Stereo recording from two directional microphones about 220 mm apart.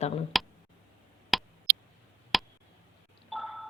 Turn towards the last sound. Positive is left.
turn(degrees=0)  # may be behind; listen again after turning